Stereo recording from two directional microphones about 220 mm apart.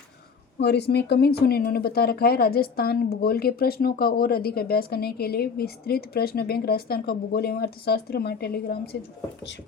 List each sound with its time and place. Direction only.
0.6 s speech: 50° left (ahead or behind)